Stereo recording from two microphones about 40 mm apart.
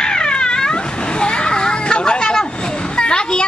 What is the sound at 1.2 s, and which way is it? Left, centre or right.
Children playing, left.